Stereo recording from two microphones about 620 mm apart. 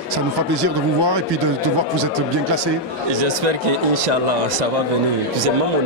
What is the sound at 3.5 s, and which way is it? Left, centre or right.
Speech, right.